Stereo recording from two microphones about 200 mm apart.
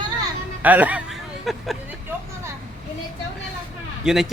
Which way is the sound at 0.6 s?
10° right (ahead or behind).